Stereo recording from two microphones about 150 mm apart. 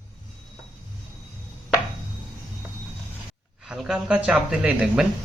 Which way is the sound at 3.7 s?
5° right (ahead or behind).